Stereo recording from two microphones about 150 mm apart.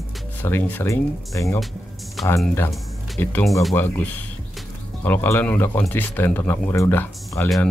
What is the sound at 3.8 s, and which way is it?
Speech, 10° left (ahead or behind).